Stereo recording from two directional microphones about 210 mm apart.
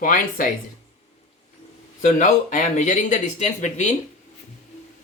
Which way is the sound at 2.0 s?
35° left (ahead or behind).